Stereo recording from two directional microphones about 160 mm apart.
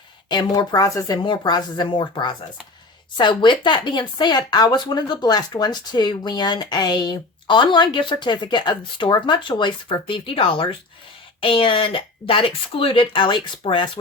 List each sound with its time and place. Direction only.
0.3 s speech: 25° left (ahead or behind)